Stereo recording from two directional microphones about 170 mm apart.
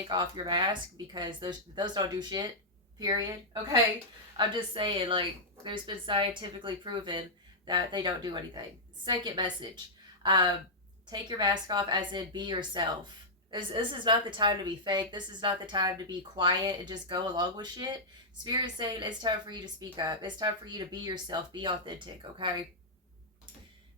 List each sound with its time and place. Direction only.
0.1 s speech: 25° right (ahead or behind)